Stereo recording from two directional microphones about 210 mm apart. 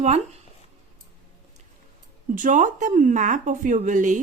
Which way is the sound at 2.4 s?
35° right (ahead or behind).